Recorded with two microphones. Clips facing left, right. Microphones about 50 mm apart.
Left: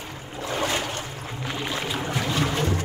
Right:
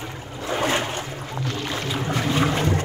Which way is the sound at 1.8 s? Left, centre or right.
Centre.